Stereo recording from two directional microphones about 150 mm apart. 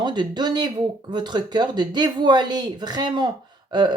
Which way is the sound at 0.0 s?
30° right (ahead or behind).